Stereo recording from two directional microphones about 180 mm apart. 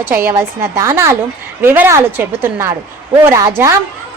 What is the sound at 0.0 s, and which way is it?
A woman's voice, 10° right (ahead or behind).